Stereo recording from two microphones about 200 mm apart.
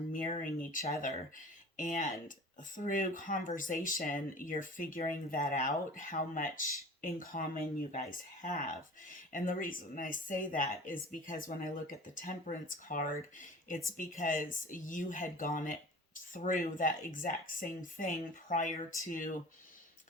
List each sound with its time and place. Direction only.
0.1 s speech: 40° left (ahead or behind)